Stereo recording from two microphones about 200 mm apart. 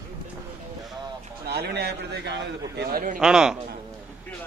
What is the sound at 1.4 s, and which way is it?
A man's voice, 50° right (ahead or behind).